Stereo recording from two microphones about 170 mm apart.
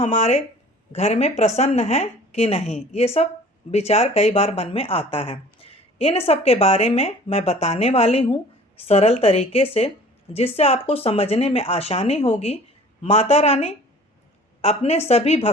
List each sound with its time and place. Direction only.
0.0 s speech: 40° left (ahead or behind)